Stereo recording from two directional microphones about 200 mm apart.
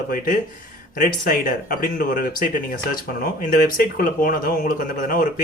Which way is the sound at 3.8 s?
45° left (ahead or behind).